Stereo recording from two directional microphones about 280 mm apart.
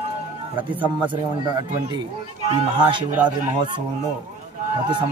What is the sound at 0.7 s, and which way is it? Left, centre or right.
Speech, centre.